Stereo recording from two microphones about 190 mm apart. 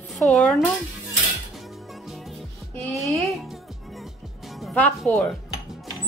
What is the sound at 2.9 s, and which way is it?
Music, centre (ahead or behind).